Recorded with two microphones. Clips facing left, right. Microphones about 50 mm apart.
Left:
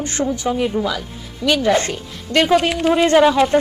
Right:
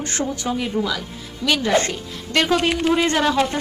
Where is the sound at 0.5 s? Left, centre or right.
Centre.